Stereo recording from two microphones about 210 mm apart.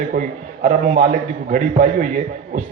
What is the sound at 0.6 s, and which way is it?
A man's voice, 35° right (ahead or behind).